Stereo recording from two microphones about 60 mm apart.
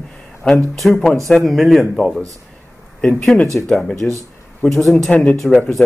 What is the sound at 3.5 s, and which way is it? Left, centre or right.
Speech, centre.